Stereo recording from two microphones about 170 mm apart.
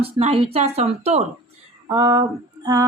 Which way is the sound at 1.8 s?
25° right (ahead or behind).